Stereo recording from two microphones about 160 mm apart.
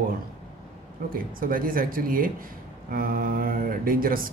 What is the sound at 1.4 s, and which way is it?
A man's voice, 60° right (ahead or behind).